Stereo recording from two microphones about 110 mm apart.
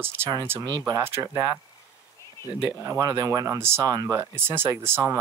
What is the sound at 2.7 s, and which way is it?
Speech, 25° right (ahead or behind).